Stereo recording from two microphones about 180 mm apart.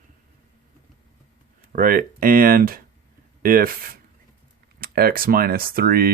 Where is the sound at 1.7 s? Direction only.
50° right (ahead or behind).